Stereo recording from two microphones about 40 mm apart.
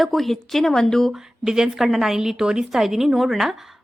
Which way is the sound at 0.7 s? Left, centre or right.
Centre.